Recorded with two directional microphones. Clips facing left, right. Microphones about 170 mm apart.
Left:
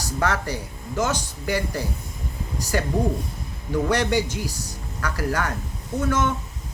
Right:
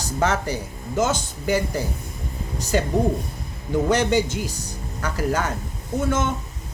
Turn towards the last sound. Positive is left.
turn(degrees=-25)  # may be behind; listen again after turning